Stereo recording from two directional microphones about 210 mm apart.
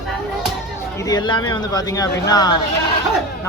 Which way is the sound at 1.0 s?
20° left (ahead or behind).